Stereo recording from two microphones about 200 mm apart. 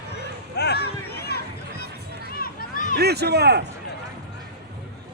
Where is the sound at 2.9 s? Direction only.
55° right (ahead or behind).